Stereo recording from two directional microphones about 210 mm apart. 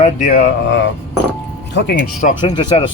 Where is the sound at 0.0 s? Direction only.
40° left (ahead or behind).